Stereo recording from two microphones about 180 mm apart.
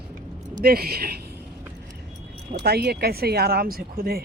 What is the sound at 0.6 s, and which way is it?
Speech, 60° right (ahead or behind).